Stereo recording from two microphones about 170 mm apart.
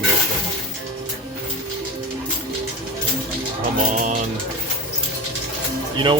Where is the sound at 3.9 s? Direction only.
45° right (ahead or behind).